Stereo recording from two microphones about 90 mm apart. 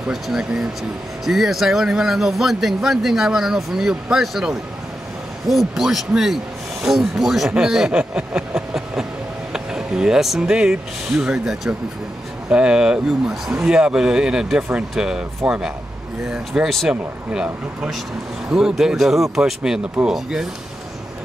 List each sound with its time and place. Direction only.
0.1 s speech: 5° right (ahead or behind)
16.6 s speech: centre (ahead or behind)
16.9 s speech: 10° right (ahead or behind)
18.5 s speech: 10° right (ahead or behind)